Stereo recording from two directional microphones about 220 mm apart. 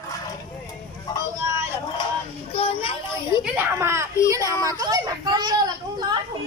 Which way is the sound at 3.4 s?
10° right (ahead or behind).